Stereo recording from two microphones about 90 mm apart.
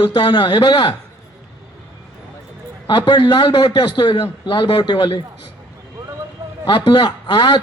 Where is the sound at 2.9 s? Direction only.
60° left (ahead or behind).